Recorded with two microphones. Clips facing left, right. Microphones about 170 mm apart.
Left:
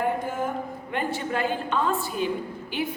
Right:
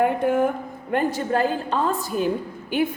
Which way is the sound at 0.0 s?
60° right (ahead or behind).